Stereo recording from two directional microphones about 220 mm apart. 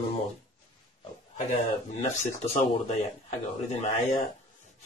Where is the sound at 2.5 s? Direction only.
30° left (ahead or behind).